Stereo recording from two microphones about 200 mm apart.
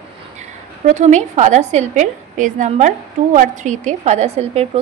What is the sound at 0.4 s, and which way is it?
A woman's voice, 35° right (ahead or behind).